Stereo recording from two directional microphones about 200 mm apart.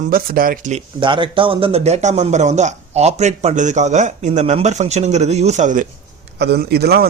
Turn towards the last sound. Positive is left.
turn(degrees=-55)  # may be behind; listen again after turning